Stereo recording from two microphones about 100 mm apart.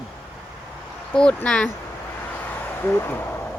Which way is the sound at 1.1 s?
10° left (ahead or behind).